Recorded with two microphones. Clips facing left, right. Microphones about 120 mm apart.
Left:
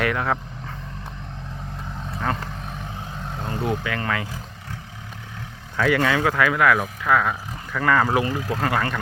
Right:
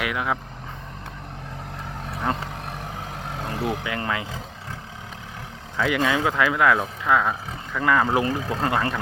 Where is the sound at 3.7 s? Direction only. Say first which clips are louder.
Left 2 dB; 20° right (ahead or behind).